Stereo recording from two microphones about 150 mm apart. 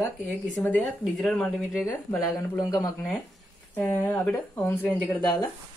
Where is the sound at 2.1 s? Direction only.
20° left (ahead or behind).